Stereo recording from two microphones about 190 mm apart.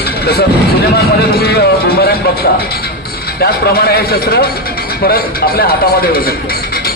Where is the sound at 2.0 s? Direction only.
55° left (ahead or behind).